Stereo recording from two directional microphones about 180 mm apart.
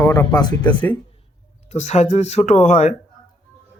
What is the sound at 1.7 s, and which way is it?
Speech, 40° left (ahead or behind).